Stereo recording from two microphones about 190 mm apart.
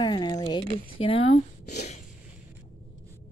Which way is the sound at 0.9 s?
30° left (ahead or behind).